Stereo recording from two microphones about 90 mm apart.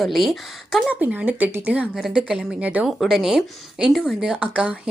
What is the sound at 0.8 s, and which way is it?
Speech, 20° right (ahead or behind).